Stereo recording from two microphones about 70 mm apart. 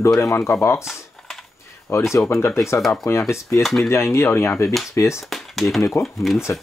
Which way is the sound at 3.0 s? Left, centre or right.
Left.